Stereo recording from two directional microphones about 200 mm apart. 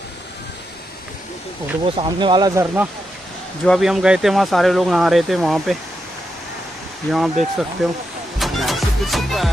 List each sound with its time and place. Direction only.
2.0 s speech: 25° right (ahead or behind)
3.6 s speech: centre (ahead or behind)
7.1 s speech: centre (ahead or behind)
8.4 s music: centre (ahead or behind)